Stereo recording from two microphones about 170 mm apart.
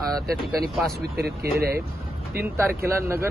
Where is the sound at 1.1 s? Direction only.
70° right (ahead or behind).